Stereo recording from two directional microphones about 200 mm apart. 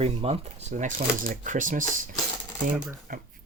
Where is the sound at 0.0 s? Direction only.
30° right (ahead or behind).